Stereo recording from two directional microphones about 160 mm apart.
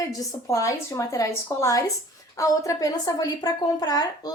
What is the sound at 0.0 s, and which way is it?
A woman's voice, 20° left (ahead or behind).